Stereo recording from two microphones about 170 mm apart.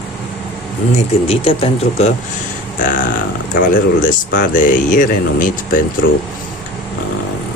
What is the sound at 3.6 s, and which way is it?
Speech, 50° left (ahead or behind).